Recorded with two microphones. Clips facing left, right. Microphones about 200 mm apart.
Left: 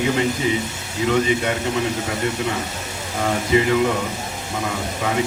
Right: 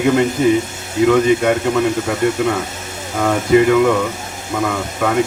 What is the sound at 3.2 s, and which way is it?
Speech, 55° right (ahead or behind).